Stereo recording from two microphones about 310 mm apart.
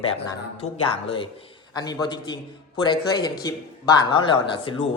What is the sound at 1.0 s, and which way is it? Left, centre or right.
Speech, centre.